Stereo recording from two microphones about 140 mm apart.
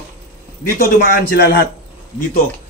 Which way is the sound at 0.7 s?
90° left.